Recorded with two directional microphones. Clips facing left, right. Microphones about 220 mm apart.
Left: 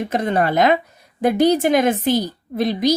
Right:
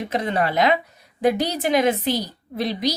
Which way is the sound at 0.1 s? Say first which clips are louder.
Left 3 dB; 50° left (ahead or behind).